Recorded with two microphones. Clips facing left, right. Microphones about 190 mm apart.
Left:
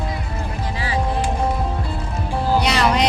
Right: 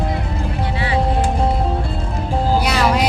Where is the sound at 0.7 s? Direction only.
35° left (ahead or behind).